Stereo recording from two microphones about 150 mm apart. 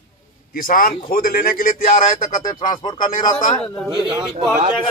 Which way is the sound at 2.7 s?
30° left (ahead or behind).